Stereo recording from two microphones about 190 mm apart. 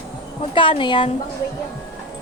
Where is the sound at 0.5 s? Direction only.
25° left (ahead or behind).